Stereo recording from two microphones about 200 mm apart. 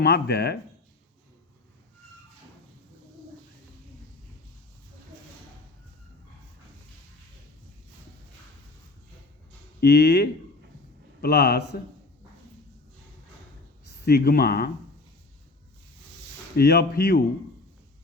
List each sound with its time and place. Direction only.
0.0 s speech: 55° left (ahead or behind)
9.8 s speech: 55° left (ahead or behind)
13.8 s speech: 50° left (ahead or behind)
16.6 s speech: 50° left (ahead or behind)